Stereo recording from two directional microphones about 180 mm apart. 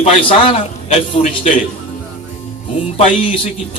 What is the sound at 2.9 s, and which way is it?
Speech, 35° left (ahead or behind).